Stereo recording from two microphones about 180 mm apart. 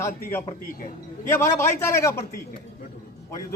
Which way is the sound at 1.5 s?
15° left (ahead or behind).